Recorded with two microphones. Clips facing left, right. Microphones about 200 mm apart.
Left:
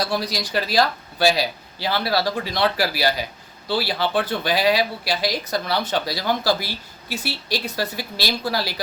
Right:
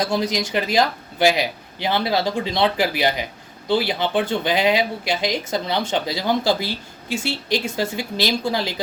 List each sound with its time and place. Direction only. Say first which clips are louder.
0.1 s speech: right 3 dB; 20° right (ahead or behind)